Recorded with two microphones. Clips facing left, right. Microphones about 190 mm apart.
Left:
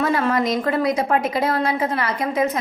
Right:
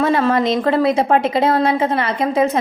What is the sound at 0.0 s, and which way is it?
A woman's voice, 25° right (ahead or behind).